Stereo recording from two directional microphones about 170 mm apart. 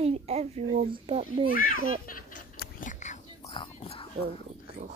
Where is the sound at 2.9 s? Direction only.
45° left (ahead or behind).